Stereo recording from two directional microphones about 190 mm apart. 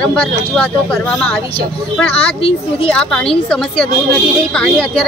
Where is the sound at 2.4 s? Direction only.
30° left (ahead or behind).